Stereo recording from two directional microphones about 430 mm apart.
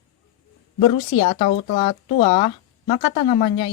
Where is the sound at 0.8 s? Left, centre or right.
Centre.